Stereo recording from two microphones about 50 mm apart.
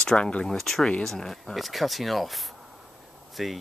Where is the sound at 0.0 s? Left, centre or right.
Centre.